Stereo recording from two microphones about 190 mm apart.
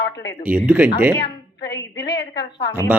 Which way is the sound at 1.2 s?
65° left (ahead or behind).